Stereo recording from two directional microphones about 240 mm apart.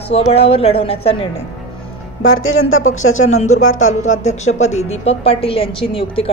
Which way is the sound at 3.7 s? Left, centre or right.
Left.